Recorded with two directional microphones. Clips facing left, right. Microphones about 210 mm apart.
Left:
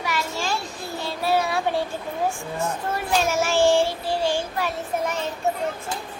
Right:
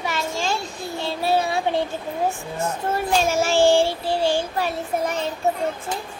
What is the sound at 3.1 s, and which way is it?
A child's voice, 30° right (ahead or behind).